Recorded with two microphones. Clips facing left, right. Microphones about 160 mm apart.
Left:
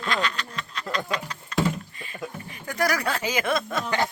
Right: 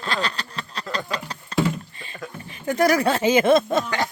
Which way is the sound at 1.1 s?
35° right (ahead or behind).